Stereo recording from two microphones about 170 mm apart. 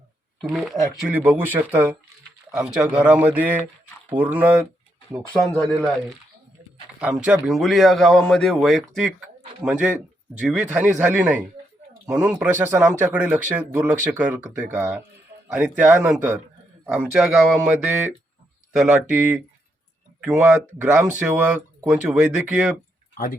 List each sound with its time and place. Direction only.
0.4 s speech: centre (ahead or behind)
7.0 s speech: 5° right (ahead or behind)
20.4 s speech: 10° right (ahead or behind)
23.1 s speech: 60° left (ahead or behind)